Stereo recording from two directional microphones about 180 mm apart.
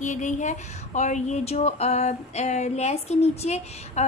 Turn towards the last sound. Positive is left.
turn(degrees=35)  # may be behind; listen again after turning